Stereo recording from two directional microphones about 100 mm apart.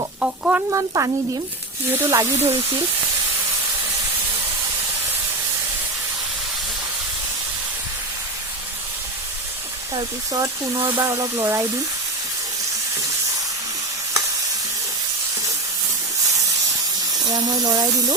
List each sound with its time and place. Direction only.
0.2 s speech: 10° right (ahead or behind)
0.7 s speech: 30° right (ahead or behind)
10.8 s speech: 30° right (ahead or behind)
17.2 s speech: 40° right (ahead or behind)